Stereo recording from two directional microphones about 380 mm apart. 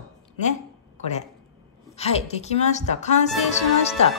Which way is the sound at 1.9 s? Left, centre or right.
Centre.